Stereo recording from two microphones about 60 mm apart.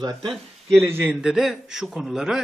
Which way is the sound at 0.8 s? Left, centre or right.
Right.